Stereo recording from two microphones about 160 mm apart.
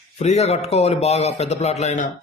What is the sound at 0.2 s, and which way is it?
A man's voice, 45° left (ahead or behind).